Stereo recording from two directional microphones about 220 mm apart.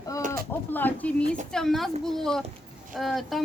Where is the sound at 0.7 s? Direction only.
10° left (ahead or behind).